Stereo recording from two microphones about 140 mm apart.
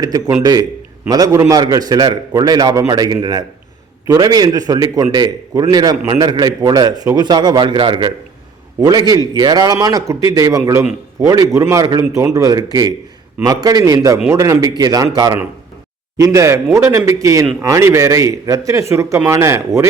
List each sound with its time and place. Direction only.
0.0 s a man's voice: 25° right (ahead or behind)